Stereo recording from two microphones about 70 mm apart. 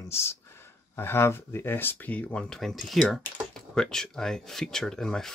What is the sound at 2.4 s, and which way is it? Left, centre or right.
Speech, centre.